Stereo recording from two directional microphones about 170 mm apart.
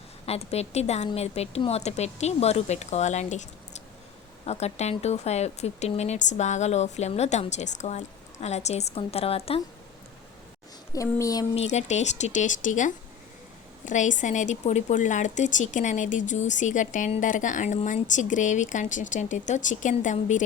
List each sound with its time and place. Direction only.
0.3 s speech: 35° left (ahead or behind)
10.9 s a sound: 20° left (ahead or behind)
11.5 s speech: 40° left (ahead or behind)